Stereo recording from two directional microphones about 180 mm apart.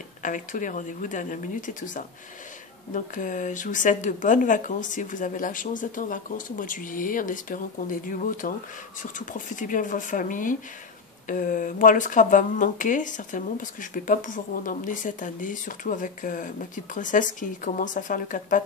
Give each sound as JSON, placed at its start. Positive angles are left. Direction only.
{"t": 0.2, "sound": "speech", "side_deg": 45}